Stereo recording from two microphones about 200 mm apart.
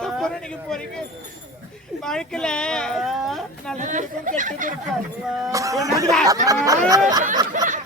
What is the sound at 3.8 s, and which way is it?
Speech, 40° right (ahead or behind).